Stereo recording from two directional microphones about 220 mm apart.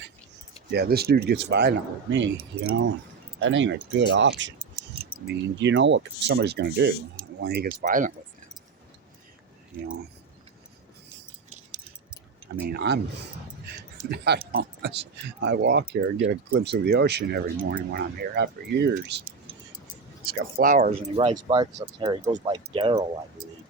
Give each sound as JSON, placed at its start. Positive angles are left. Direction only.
{"t": 0.7, "sound": "speech", "side_deg": -45}
{"t": 2.1, "sound": "speech", "side_deg": -65}
{"t": 7.8, "sound": "speech", "side_deg": -35}
{"t": 12.5, "sound": "speech", "side_deg": -45}
{"t": 14.1, "sound": "speech", "side_deg": -45}
{"t": 21.4, "sound": "speech", "side_deg": -20}